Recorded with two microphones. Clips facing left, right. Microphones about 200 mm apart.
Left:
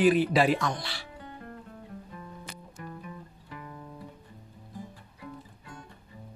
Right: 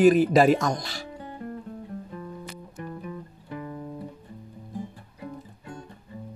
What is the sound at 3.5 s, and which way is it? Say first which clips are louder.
Music: right 9 dB; 40° right (ahead or behind).